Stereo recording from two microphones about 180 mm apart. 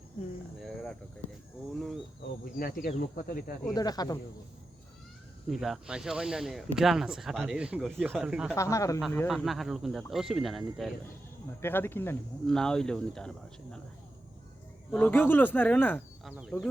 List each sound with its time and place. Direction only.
2.2 s speech: 55° left (ahead or behind)
3.8 s speech: 20° left (ahead or behind)
5.5 s speech: centre (ahead or behind)
8.5 s speech: 15° left (ahead or behind)
9.1 s speech: centre (ahead or behind)
11.6 s speech: 10° left (ahead or behind)
14.9 s speech: 10° left (ahead or behind)
16.2 s speech: 5° right (ahead or behind)